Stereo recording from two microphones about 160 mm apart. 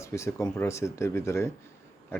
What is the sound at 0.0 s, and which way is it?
Speech, 20° left (ahead or behind).